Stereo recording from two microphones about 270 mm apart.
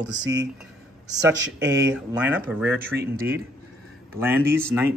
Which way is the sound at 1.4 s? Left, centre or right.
Right.